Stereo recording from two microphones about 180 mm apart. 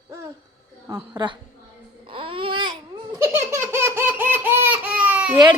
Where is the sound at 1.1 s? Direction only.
25° right (ahead or behind).